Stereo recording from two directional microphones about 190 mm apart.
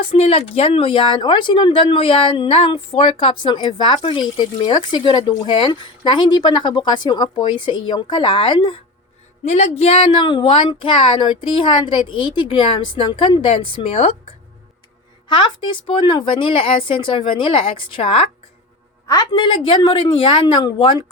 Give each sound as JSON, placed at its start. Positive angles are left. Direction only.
{"t": 0.1, "sound": "speech", "side_deg": 30}
{"t": 9.4, "sound": "speech", "side_deg": 35}
{"t": 15.3, "sound": "speech", "side_deg": 25}